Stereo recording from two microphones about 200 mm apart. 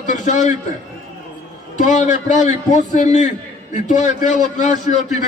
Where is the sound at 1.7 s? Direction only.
40° left (ahead or behind).